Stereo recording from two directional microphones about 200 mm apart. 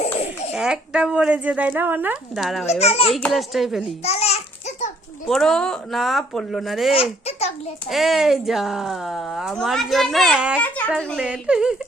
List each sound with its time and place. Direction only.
0.0 s a sound: 35° left (ahead or behind)
0.5 s speech: 5° right (ahead or behind)
2.6 s a child's voice: 30° left (ahead or behind)
3.1 s speech: 5° left (ahead or behind)
3.8 s babbling: 30° left (ahead or behind)
5.3 s speech: 5° left (ahead or behind)
6.9 s a sound: 30° left (ahead or behind)
7.9 s speech: centre (ahead or behind)
10.6 s speech: 5° left (ahead or behind)